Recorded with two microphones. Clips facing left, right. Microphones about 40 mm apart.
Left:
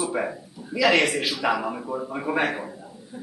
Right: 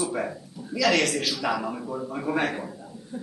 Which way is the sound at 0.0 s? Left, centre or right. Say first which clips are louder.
Left 2 dB; centre.